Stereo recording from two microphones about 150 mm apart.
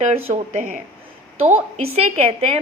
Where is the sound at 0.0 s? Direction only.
45° right (ahead or behind).